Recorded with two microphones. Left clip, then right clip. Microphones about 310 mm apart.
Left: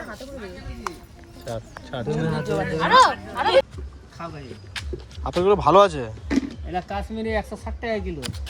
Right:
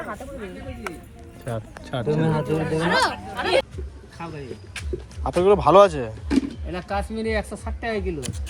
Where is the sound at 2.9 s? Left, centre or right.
Centre.